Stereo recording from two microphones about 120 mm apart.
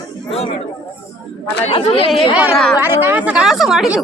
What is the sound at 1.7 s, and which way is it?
Speech, 55° left (ahead or behind).